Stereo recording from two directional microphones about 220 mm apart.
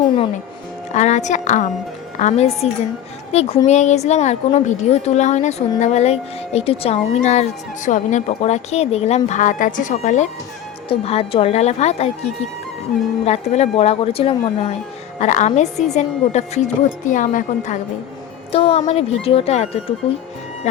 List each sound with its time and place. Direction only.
0.9 s a woman's voice: 30° left (ahead or behind)